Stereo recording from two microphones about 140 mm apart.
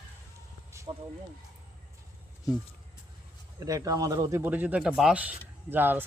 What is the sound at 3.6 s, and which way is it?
Speech, 25° right (ahead or behind).